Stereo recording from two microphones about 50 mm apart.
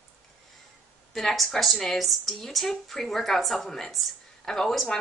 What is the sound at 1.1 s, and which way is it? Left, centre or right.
Speech, centre.